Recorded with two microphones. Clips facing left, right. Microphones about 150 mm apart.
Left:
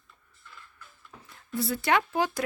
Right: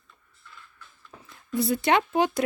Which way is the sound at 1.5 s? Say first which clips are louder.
Right 3 dB; 15° right (ahead or behind).